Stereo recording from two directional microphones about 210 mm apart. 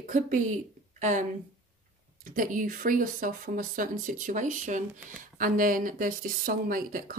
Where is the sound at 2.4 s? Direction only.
40° right (ahead or behind).